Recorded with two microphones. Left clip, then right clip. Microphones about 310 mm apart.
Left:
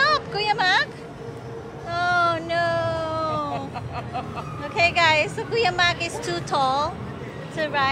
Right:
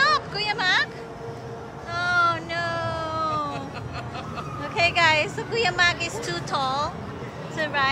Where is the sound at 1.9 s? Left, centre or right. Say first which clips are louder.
Left 1 dB; centre.